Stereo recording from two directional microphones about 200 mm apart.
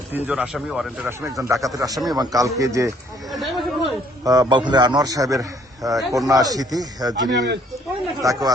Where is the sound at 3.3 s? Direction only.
Centre (ahead or behind).